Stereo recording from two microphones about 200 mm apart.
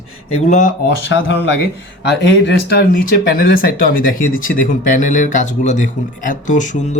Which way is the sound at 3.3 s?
45° left (ahead or behind).